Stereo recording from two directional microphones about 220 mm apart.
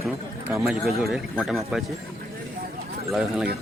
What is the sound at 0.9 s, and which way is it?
Speech, centre (ahead or behind).